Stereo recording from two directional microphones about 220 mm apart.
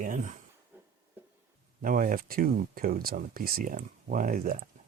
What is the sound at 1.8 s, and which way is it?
Speech, 40° right (ahead or behind).